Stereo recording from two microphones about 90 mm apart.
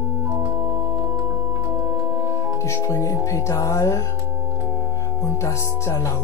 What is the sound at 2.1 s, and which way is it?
Organ, 30° right (ahead or behind).